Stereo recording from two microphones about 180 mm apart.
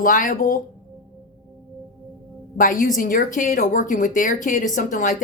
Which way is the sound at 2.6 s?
50° left (ahead or behind).